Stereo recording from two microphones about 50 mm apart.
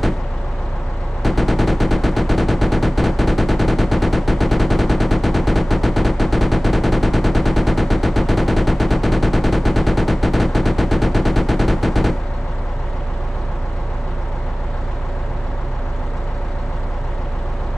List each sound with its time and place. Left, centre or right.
1.2 s machine gun: centre